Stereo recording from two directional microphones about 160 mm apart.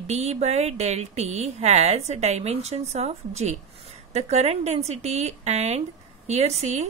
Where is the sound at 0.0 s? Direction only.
45° right (ahead or behind).